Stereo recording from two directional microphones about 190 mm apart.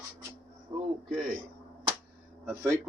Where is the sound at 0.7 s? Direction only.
25° right (ahead or behind).